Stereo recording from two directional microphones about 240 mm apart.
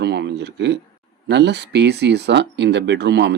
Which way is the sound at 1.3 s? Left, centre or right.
Right.